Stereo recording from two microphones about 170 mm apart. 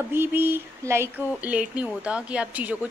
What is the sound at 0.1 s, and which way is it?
A woman's voice, 10° right (ahead or behind).